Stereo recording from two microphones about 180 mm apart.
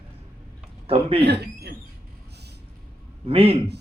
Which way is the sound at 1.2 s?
65° right (ahead or behind).